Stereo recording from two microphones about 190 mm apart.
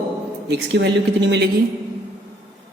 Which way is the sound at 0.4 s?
65° right (ahead or behind).